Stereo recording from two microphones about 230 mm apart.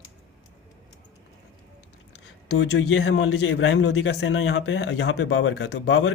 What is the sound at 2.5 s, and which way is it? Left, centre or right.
Speech, left.